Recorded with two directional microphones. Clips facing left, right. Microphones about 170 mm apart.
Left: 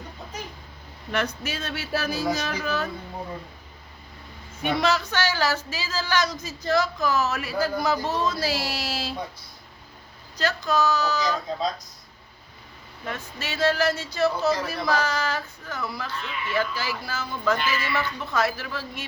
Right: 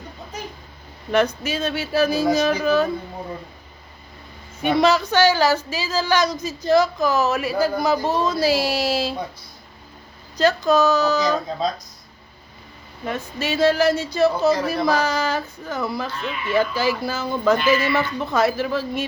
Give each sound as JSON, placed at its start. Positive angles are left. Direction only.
{"t": 1.1, "sound": "speech", "side_deg": -20}
{"t": 4.6, "sound": "speech", "side_deg": -20}
{"t": 10.3, "sound": "speech", "side_deg": -20}
{"t": 13.1, "sound": "speech", "side_deg": -15}